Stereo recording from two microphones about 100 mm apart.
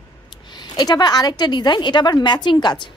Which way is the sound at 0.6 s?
45° left (ahead or behind).